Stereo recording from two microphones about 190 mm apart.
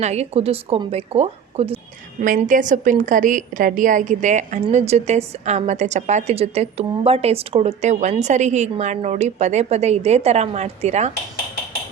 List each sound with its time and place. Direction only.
0.0 s a woman's voice: 35° right (ahead or behind)
2.2 s a woman's voice: 45° right (ahead or behind)